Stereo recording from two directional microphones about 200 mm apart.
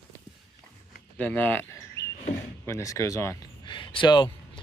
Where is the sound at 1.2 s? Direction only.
10° left (ahead or behind); by 4.3 s 25° left (ahead or behind).